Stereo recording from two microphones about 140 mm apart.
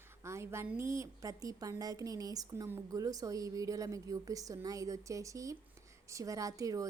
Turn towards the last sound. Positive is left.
turn(degrees=-25)  # may be behind; listen again after turning